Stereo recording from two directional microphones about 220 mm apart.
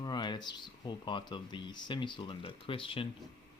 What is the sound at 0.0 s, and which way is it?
Speech, 20° left (ahead or behind).